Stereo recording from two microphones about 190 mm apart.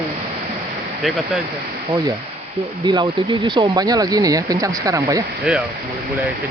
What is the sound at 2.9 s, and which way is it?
Speech, 25° right (ahead or behind).